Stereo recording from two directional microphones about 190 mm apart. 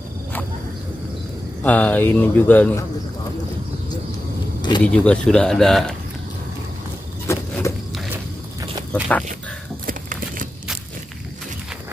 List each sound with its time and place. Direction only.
1.6 s speech: 10° left (ahead or behind)
4.6 s vehicle: 25° left (ahead or behind)
4.8 s speech: 5° left (ahead or behind)
7.2 s insect: 15° left (ahead or behind)
9.8 s a sound: 45° right (ahead or behind)